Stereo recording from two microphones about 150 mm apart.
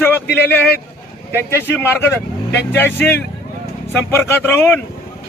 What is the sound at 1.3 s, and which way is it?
Speech, 15° left (ahead or behind).